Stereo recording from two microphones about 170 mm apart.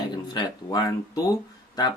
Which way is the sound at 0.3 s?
25° left (ahead or behind).